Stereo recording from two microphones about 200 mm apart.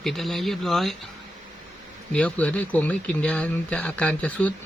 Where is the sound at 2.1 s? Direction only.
5° left (ahead or behind).